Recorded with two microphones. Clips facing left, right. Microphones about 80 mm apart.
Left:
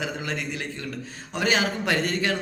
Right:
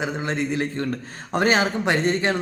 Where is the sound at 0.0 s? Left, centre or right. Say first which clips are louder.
Right 5 dB; right.